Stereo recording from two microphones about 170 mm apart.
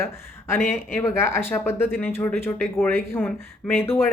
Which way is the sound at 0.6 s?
Centre (ahead or behind).